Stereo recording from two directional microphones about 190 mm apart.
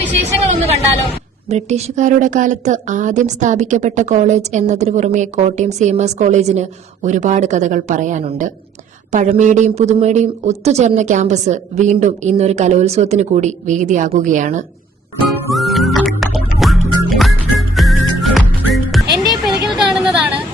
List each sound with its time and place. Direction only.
0.4 s vehicle: 35° right (ahead or behind)
1.5 s a woman's voice: 35° right (ahead or behind)
15.3 s music: centre (ahead or behind)
19.5 s a sound: centre (ahead or behind)